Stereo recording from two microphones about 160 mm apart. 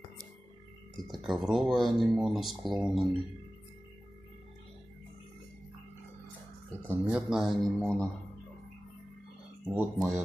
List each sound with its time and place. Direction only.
0.9 s speech: centre (ahead or behind)
6.9 s speech: 5° right (ahead or behind)
9.9 s speech: 20° right (ahead or behind)